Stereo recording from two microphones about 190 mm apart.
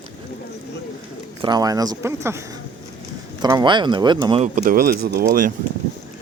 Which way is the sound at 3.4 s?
20° right (ahead or behind).